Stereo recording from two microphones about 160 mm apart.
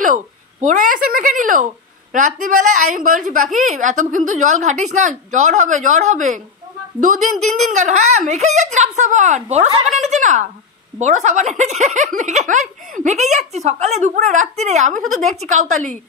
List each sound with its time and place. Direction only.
0.0 s a woman's voice: 55° right (ahead or behind)